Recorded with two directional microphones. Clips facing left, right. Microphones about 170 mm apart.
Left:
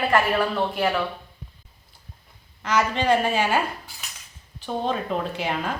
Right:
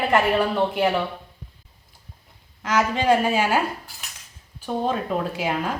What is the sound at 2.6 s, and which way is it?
Speech, 10° right (ahead or behind).